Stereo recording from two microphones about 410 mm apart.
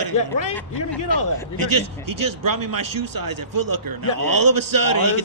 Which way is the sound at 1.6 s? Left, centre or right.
Right.